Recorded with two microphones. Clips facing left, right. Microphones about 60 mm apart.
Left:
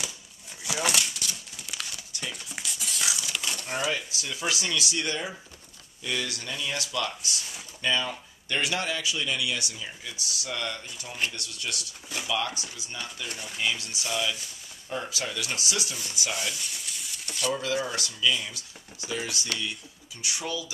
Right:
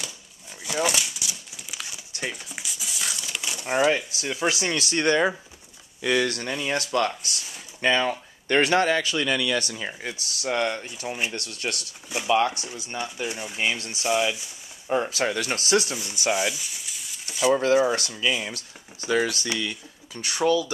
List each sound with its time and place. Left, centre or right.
0.7 s crumpling: centre
2.5 s a sound: centre
3.3 s a sound: centre
3.6 s a man's voice: right
10.1 s speech: right
13.3 s speech: centre
13.6 s a man's voice: right
16.3 s a sound: centre
17.5 s a man's voice: right
19.0 s speech: right
20.2 s a man's voice: right